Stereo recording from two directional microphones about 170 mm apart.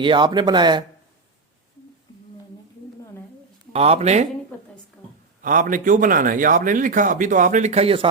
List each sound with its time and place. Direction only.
0.0 s speech: 30° right (ahead or behind)
3.7 s speech: 35° right (ahead or behind)
5.4 s a man's voice: 50° right (ahead or behind); by 8.0 s 35° right (ahead or behind)